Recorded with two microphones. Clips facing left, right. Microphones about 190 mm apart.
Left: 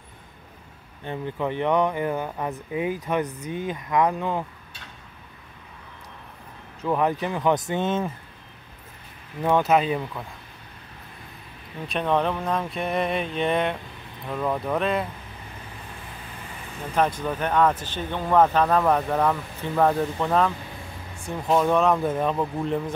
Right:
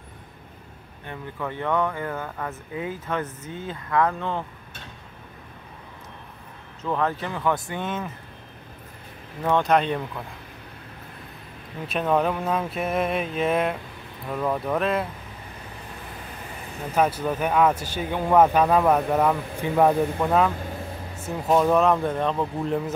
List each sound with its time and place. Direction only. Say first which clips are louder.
1.0 s speech: left 5 dB; 20° left (ahead or behind)
6.8 s speech: left 2 dB; 15° left (ahead or behind)
9.4 s speech: left 1 dB; 5° left (ahead or behind)
11.9 s speech: right 1 dB; 5° right (ahead or behind)
16.9 s speech: right 1 dB; 10° right (ahead or behind)